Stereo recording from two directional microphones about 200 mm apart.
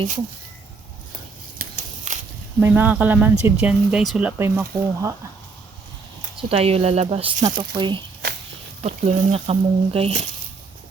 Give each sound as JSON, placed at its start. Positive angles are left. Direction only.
{"t": 1.5, "sound": "a sound", "side_deg": -40}
{"t": 2.6, "sound": "speech", "side_deg": -10}
{"t": 6.3, "sound": "speech", "side_deg": -30}